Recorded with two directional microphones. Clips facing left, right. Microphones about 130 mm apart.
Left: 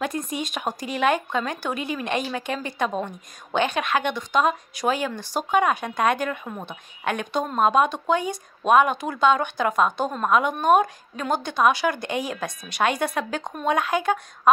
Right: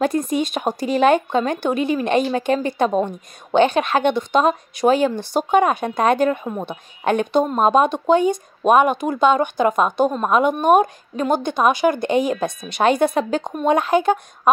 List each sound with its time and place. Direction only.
0.0 s speech: 30° right (ahead or behind)